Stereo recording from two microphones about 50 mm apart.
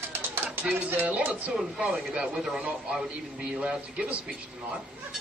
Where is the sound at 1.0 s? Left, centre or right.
Right.